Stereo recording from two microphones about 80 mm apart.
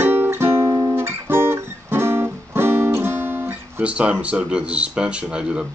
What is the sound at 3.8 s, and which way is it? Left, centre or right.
Speech, centre.